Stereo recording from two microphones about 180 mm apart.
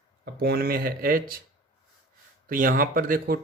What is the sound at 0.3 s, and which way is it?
Speech, 60° right (ahead or behind).